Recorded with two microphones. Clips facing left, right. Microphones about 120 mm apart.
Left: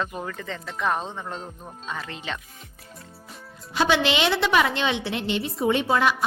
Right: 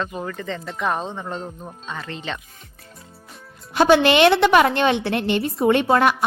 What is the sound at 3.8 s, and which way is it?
A woman's voice, 50° right (ahead or behind).